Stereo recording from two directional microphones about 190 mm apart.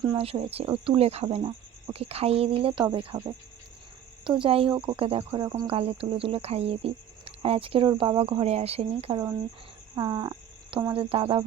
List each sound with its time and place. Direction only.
0.0 s speech: 25° right (ahead or behind)
9.9 s frog: 20° right (ahead or behind)
10.9 s speech: 30° right (ahead or behind)